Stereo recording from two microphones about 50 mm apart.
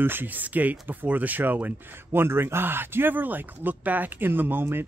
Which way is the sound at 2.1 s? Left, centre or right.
Right.